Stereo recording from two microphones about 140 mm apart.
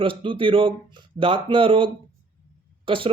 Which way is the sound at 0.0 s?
40° right (ahead or behind).